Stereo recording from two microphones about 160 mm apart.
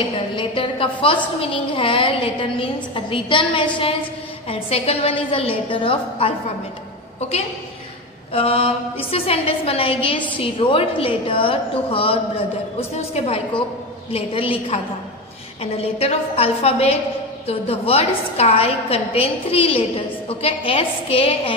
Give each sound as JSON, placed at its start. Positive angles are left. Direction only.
{"t": 0.4, "sound": "a woman's voice", "side_deg": 30}
{"t": 15.6, "sound": "a woman's voice", "side_deg": 40}